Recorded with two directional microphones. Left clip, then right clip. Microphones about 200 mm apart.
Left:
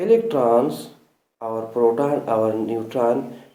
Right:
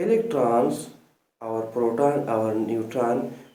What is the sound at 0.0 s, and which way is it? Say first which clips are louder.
Speech: left 4 dB; 40° left (ahead or behind).